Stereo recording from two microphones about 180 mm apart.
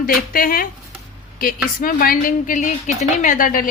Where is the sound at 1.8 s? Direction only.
50° left (ahead or behind).